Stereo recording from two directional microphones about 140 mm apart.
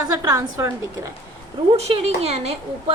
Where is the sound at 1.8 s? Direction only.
50° right (ahead or behind).